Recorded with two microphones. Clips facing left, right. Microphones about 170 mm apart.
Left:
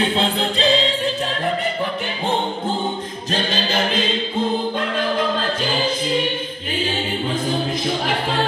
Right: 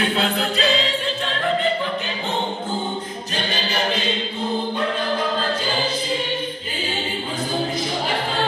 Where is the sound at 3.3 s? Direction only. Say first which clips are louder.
Left 4 dB; 90° left.